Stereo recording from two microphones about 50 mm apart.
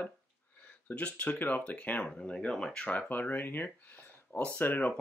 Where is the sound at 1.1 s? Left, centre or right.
Left.